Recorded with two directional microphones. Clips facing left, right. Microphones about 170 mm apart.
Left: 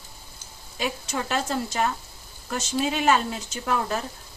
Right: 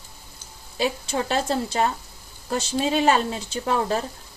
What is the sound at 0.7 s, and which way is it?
Speech, 30° right (ahead or behind).